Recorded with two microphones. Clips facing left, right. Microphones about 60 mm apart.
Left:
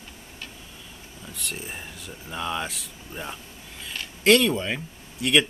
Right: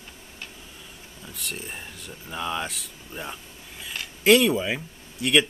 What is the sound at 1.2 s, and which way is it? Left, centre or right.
Speech, centre.